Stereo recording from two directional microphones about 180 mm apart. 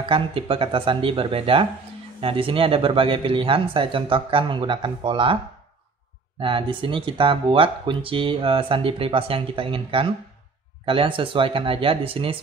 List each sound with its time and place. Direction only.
0.0 s speech: 30° right (ahead or behind)
6.4 s speech: 30° right (ahead or behind)